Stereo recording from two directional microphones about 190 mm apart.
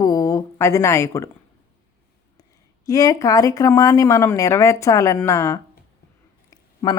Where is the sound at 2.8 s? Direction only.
20° left (ahead or behind).